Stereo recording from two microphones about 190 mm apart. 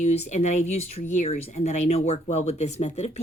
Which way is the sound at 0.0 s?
35° left (ahead or behind).